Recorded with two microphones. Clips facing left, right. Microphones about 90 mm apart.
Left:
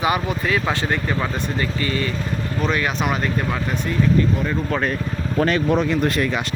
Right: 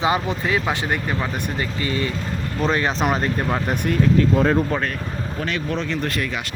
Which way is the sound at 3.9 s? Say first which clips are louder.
Right 1 dB; 80° right.